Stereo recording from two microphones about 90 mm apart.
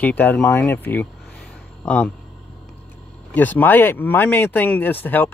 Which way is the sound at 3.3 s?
20° left (ahead or behind).